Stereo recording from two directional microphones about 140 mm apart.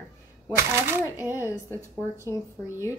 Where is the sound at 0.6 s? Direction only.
15° right (ahead or behind).